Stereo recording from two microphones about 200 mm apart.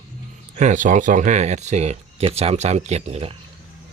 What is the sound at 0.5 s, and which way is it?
Speech, 35° right (ahead or behind).